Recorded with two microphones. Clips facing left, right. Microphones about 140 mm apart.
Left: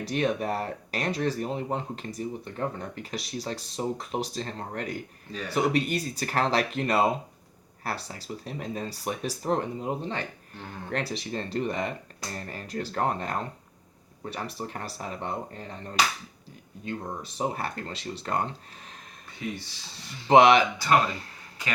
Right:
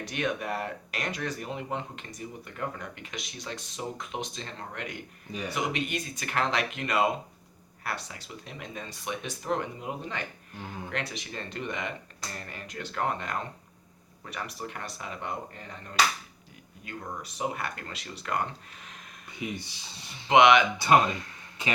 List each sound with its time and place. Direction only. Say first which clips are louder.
0.0 s speech: left 4 dB; 35° left (ahead or behind)
16.8 s speech: left 4 dB; 30° left (ahead or behind)
19.4 s speech: left 1 dB; 15° right (ahead or behind)
20.2 s speech: left 2 dB; 35° left (ahead or behind)
20.7 s speech: right 1 dB; 20° right (ahead or behind)